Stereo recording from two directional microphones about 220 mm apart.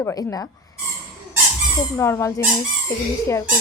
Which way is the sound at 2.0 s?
10° left (ahead or behind).